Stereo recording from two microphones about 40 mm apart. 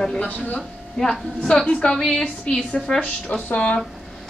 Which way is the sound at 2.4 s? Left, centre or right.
Left.